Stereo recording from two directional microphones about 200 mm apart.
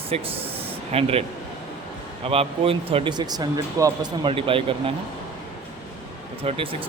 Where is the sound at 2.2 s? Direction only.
30° right (ahead or behind).